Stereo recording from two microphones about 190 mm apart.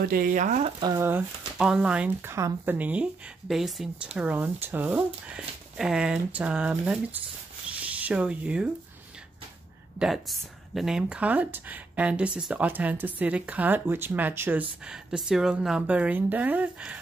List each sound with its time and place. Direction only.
0.1 s speech: 45° right (ahead or behind)
0.7 s speech: 20° right (ahead or behind)
9.9 s speech: centre (ahead or behind)